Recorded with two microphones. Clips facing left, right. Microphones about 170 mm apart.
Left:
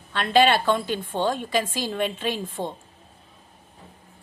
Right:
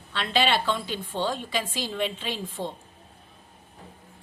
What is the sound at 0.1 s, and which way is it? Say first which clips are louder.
Speech: left 6 dB; 50° left (ahead or behind).